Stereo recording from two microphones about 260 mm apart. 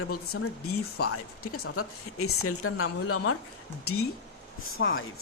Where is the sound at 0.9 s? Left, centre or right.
Left.